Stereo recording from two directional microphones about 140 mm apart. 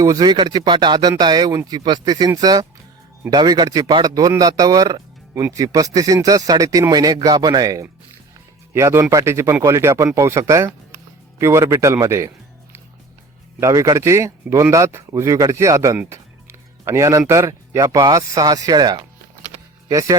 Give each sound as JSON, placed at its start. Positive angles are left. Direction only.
{"t": 0.0, "sound": "speech", "side_deg": -25}
{"t": 13.6, "sound": "speech", "side_deg": -25}